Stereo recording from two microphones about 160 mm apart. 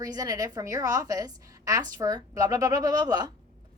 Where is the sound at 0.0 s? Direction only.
20° right (ahead or behind).